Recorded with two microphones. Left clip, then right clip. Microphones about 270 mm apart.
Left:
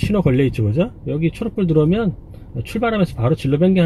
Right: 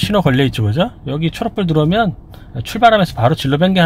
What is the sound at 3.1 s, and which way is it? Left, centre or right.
Speech, right.